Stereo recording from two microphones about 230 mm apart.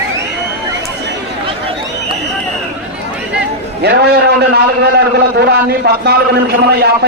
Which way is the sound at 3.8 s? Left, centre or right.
Right.